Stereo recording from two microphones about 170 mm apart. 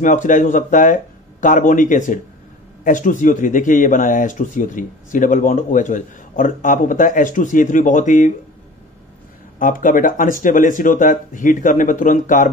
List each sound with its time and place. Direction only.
0.0 s speech: 50° left (ahead or behind)
9.6 s speech: 50° left (ahead or behind)